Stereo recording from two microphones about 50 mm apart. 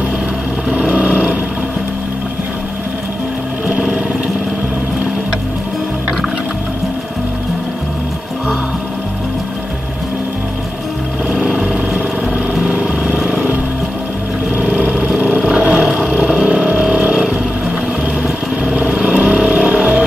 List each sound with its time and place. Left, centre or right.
0.7 s vehicle: centre
3.6 s a sound: centre
11.2 s vehicle: centre
14.6 s vehicle: centre
15.4 s a sound: centre
16.2 s vehicle: centre
18.8 s vehicle: centre